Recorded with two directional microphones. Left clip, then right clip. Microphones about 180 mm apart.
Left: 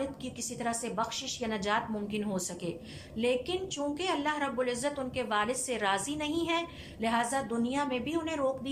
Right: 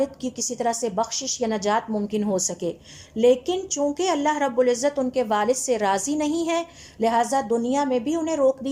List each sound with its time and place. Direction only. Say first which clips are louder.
0.0 s a woman's voice: right 11 dB; 30° right (ahead or behind)